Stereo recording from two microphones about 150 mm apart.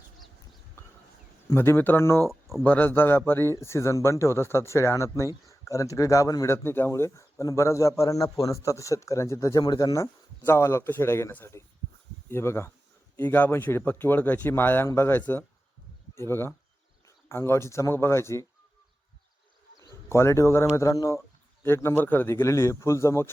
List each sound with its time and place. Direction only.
1.5 s speech: 15° left (ahead or behind)
19.8 s speech: 15° left (ahead or behind)